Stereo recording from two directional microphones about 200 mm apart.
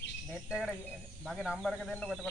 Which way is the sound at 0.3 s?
5° right (ahead or behind).